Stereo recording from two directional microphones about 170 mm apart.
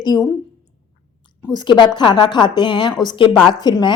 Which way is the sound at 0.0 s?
25° left (ahead or behind).